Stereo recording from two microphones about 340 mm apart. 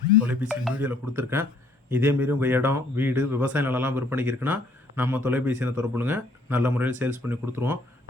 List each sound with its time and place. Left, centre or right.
0.2 s speech: centre